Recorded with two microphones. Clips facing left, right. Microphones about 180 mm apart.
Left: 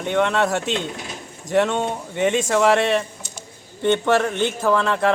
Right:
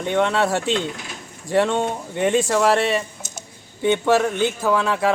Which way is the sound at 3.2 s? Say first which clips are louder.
Right 1 dB; 45° right (ahead or behind).